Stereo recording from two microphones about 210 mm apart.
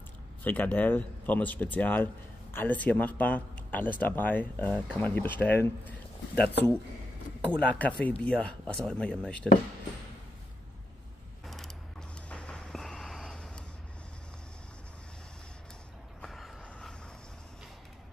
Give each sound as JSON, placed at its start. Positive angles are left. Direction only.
{"t": 0.4, "sound": "speech", "side_deg": 10}
{"t": 6.3, "sound": "speech", "side_deg": 50}
{"t": 7.8, "sound": "speech", "side_deg": 5}
{"t": 11.4, "sound": "mechanisms", "side_deg": 0}
{"t": 12.3, "sound": "a sound", "side_deg": 5}
{"t": 16.2, "sound": "a sound", "side_deg": 0}